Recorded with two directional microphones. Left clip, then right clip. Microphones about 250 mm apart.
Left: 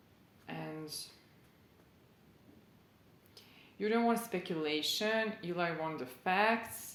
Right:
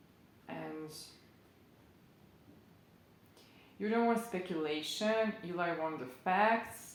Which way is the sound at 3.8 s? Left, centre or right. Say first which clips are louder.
Even; left.